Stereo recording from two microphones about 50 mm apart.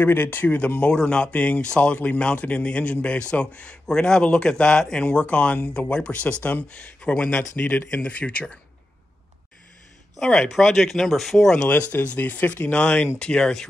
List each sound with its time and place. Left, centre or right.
0.0 s speech: left
0.6 s a man's voice: left
1.3 s a man's voice: left
3.8 s a man's voice: centre
7.5 s speech: left
8.0 s a man's voice: left
10.2 s speech: centre
11.7 s speech: left
12.7 s a man's voice: left